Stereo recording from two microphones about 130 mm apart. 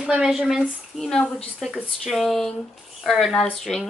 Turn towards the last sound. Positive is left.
turn(degrees=5)  # may be behind; listen again after turning